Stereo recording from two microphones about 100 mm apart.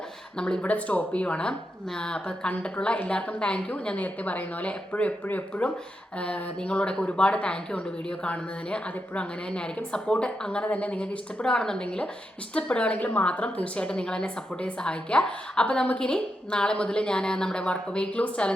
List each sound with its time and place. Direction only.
0.3 s a woman's voice: 10° left (ahead or behind)